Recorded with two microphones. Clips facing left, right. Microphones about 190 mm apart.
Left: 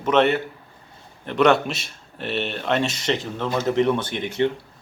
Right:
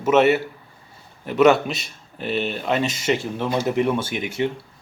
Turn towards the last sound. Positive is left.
turn(degrees=-10)  # may be behind; listen again after turning